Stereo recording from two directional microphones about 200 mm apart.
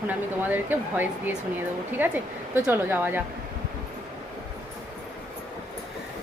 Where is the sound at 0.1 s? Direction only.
10° right (ahead or behind).